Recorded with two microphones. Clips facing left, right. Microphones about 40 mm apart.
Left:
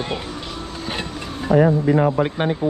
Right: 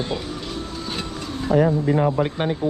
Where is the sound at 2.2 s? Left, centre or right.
Left.